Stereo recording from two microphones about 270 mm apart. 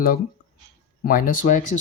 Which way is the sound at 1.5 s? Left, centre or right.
Left.